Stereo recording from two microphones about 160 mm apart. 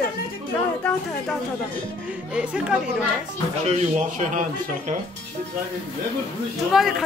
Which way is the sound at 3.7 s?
50° right (ahead or behind).